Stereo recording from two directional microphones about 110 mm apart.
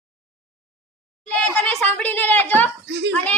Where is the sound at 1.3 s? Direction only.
10° left (ahead or behind).